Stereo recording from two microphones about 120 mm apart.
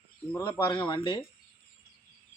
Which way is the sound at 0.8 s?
40° left (ahead or behind).